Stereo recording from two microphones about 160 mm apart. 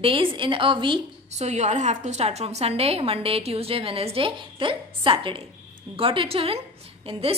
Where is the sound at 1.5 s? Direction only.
45° right (ahead or behind).